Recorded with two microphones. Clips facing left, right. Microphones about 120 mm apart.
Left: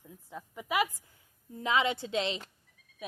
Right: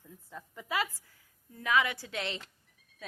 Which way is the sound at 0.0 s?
15° left (ahead or behind).